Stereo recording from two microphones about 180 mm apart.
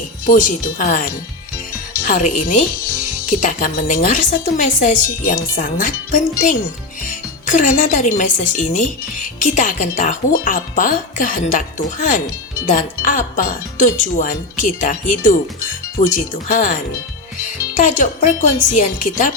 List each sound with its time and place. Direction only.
0.3 s speech: 45° left (ahead or behind)
2.0 s speech: 45° left (ahead or behind)
7.4 s speech: 45° left (ahead or behind)
17.7 s speech: 45° left (ahead or behind)